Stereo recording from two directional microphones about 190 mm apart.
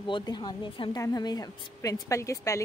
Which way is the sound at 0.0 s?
25° left (ahead or behind).